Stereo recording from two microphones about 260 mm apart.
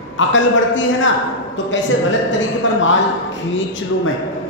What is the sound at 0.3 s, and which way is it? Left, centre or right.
Speech, left.